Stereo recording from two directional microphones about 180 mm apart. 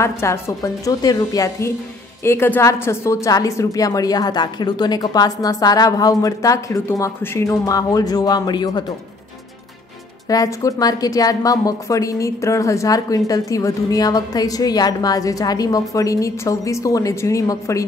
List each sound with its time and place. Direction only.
0.0 s a woman's voice: 15° left (ahead or behind)
10.2 s a woman's voice: 20° left (ahead or behind)